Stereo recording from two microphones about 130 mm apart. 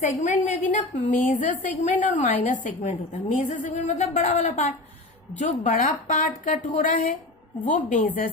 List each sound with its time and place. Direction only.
0.0 s a woman's voice: 65° left (ahead or behind); by 8.3 s 90° left